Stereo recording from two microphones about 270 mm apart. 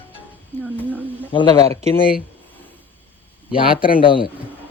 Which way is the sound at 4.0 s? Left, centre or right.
Centre.